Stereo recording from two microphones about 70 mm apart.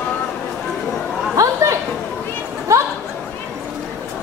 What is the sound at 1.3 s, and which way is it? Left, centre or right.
Chatter, right.